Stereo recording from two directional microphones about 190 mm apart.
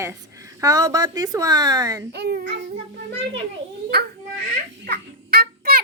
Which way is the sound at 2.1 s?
60° right (ahead or behind).